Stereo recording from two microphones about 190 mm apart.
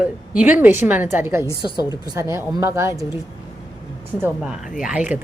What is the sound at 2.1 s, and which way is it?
Speech, 15° right (ahead or behind).